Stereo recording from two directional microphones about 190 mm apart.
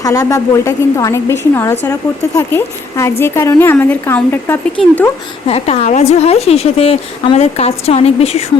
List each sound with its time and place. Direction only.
0.0 s a woman's voice: 15° left (ahead or behind)
5.5 s a woman's voice: 30° left (ahead or behind)